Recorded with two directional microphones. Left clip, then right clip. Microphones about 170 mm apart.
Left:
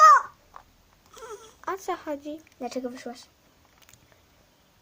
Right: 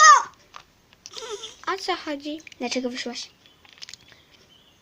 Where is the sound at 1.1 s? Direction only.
35° right (ahead or behind).